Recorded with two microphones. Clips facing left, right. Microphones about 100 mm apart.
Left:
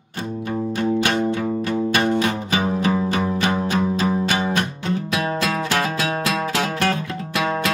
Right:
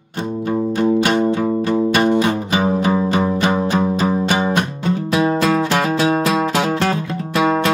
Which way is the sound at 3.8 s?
40° right (ahead or behind).